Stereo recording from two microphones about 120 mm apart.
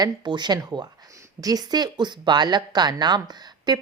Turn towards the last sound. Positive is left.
turn(degrees=-35)  # may be behind; listen again after turning